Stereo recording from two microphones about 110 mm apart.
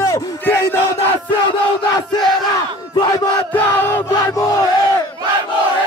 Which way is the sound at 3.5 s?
20° left (ahead or behind).